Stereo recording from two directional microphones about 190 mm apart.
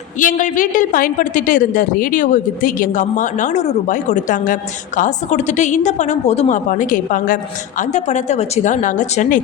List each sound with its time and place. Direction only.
0.2 s a woman's voice: 40° left (ahead or behind)